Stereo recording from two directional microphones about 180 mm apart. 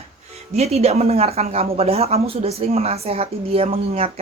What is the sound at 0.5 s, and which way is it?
Speech, 35° right (ahead or behind).